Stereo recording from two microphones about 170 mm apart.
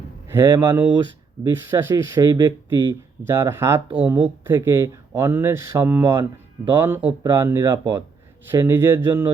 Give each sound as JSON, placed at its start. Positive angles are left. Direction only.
{"t": 0.3, "sound": "speech", "side_deg": -15}